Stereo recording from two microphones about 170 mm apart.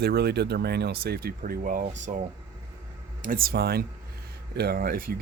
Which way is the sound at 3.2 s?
55° right (ahead or behind).